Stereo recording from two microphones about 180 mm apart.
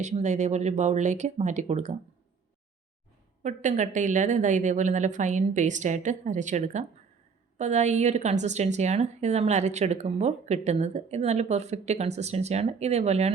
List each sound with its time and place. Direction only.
0.0 s a woman's voice: 40° right (ahead or behind)
3.4 s a woman's voice: 45° right (ahead or behind)